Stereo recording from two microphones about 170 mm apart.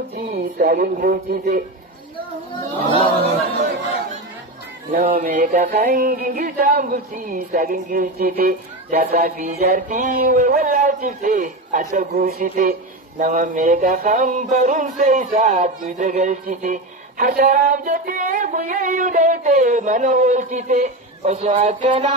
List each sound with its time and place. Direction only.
0.1 s speech: 55° right (ahead or behind)
5.0 s a sound: 55° right (ahead or behind)
13.2 s music: 50° right (ahead or behind)